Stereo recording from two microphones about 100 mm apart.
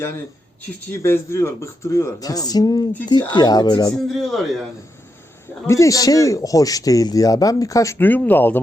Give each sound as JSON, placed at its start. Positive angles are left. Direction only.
{"t": 0.9, "sound": "speech", "side_deg": 25}
{"t": 3.9, "sound": "a man's voice", "side_deg": 0}
{"t": 5.6, "sound": "speech", "side_deg": 30}
{"t": 7.9, "sound": "speech", "side_deg": 15}